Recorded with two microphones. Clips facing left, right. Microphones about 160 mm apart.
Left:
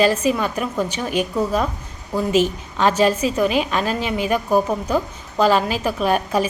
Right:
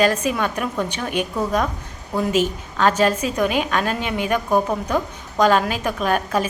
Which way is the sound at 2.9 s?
10° left (ahead or behind).